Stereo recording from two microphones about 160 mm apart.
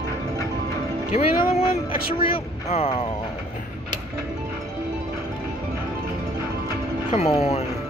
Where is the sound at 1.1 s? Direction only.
35° left (ahead or behind).